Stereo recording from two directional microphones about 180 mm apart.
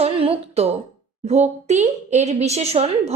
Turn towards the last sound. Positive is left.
turn(degrees=-35)  # may be behind; listen again after turning